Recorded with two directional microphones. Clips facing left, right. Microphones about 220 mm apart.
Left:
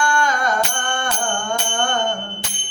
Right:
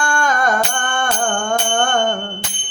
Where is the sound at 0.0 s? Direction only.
50° right (ahead or behind).